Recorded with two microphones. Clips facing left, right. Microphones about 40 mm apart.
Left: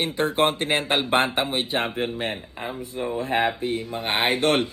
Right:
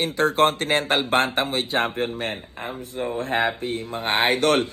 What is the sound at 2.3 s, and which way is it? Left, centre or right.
Speech, right.